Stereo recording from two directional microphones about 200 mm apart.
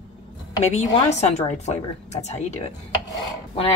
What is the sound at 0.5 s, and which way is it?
Speech, 35° left (ahead or behind).